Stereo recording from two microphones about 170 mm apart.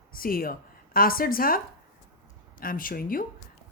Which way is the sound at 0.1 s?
60° left (ahead or behind).